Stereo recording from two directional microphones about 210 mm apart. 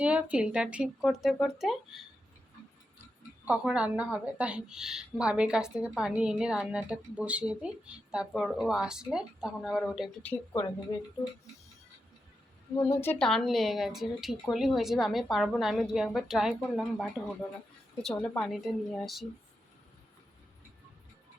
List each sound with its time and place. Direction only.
0.0 s a woman's voice: 5° right (ahead or behind)
3.4 s a woman's voice: 5° right (ahead or behind)
10.9 s speech: 20° left (ahead or behind)
12.9 s a woman's voice: 10° left (ahead or behind)